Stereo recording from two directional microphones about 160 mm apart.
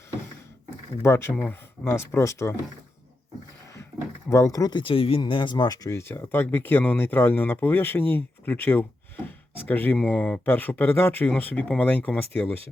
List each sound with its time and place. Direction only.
1.0 s speech: 15° left (ahead or behind)
3.9 s a sound: 20° right (ahead or behind)
4.3 s speech: 20° left (ahead or behind)